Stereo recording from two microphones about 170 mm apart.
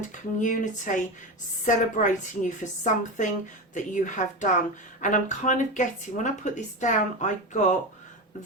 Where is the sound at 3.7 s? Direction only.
45° left (ahead or behind).